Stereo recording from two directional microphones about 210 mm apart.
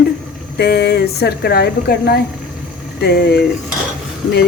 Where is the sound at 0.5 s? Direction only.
50° left (ahead or behind).